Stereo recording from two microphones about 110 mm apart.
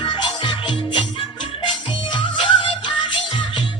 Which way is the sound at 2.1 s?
50° left (ahead or behind).